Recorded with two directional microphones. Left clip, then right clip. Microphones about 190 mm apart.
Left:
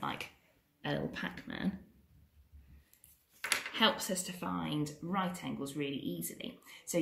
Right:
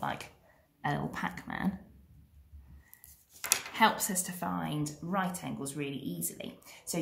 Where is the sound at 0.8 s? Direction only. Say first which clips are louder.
Right 3 dB; 35° right (ahead or behind).